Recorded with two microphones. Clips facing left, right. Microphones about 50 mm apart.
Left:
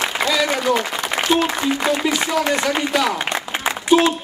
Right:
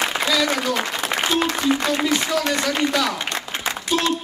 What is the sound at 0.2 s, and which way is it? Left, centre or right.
Speech, centre.